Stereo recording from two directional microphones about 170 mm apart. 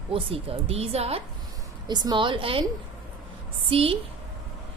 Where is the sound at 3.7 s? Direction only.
35° right (ahead or behind).